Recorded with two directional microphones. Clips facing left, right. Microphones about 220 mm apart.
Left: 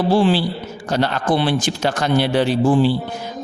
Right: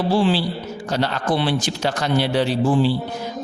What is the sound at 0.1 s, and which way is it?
A man's voice, 50° left (ahead or behind).